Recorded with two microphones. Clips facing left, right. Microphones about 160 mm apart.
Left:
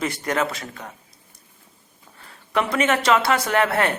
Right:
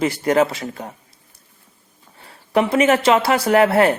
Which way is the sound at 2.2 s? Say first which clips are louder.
Right 5 dB; 30° right (ahead or behind).